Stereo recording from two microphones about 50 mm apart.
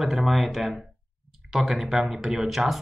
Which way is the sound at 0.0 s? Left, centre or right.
Centre.